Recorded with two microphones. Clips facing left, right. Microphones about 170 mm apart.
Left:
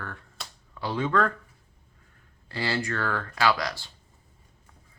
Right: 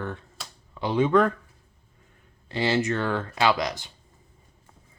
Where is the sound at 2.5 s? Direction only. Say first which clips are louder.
Right 5 dB; 20° right (ahead or behind).